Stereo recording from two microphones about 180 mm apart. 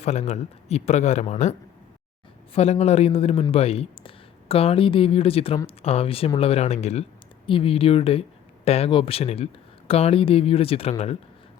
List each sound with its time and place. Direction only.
0.0 s speech: 40° left (ahead or behind)